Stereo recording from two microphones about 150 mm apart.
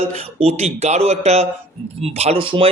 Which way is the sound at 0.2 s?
45° right (ahead or behind).